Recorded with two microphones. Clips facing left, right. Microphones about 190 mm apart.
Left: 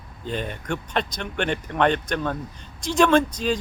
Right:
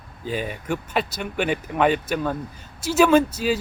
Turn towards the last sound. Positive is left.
turn(degrees=-5)  # may be behind; listen again after turning